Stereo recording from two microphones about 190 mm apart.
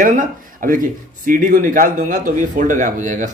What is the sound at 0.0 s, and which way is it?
A man's voice, 45° right (ahead or behind).